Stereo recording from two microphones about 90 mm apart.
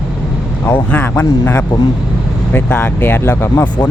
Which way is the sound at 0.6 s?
20° left (ahead or behind).